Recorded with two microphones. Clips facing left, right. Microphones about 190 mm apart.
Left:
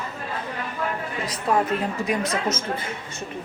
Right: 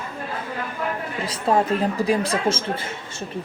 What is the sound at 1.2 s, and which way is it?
A woman's voice, 30° right (ahead or behind).